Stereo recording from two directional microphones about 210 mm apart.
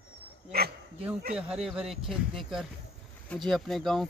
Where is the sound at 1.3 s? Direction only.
5° right (ahead or behind).